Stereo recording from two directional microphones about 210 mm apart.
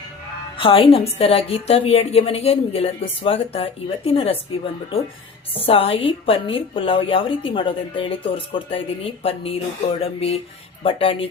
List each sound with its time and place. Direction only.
0.5 s a woman's voice: 25° left (ahead or behind)
5.5 s a woman's voice: 25° left (ahead or behind)